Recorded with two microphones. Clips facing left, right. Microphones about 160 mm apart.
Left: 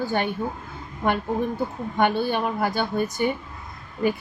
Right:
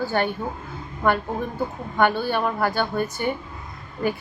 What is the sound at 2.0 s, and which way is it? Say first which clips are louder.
Speech: right 1 dB; 15° left (ahead or behind).